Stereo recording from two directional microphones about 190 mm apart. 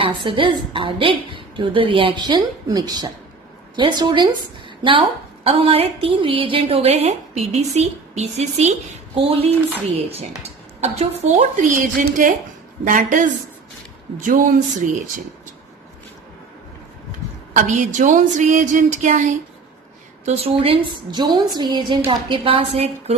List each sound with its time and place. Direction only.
0.0 s a woman's voice: 25° right (ahead or behind)
9.7 s a woman's voice: 30° right (ahead or behind)
17.6 s a woman's voice: 40° right (ahead or behind)